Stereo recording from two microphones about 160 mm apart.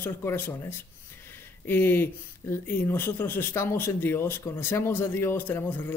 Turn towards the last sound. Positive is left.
turn(degrees=10)  # may be behind; listen again after turning